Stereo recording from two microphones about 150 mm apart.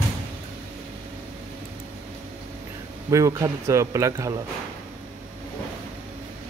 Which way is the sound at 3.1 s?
20° right (ahead or behind).